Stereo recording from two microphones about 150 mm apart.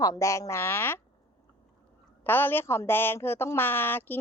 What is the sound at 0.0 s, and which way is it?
Speech, 20° left (ahead or behind).